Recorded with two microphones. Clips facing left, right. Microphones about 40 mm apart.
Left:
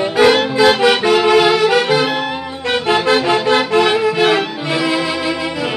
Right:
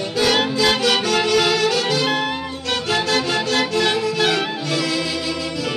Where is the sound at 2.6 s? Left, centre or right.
Left.